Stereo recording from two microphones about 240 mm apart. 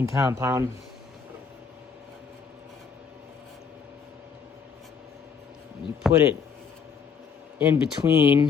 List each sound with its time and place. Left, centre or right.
0.0 s speech: centre
6.0 s speech: centre
7.6 s speech: centre